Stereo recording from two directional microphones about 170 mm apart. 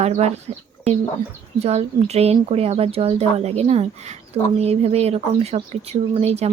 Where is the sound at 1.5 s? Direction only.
40° right (ahead or behind).